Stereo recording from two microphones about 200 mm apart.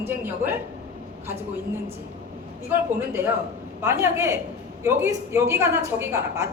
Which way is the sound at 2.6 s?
10° right (ahead or behind).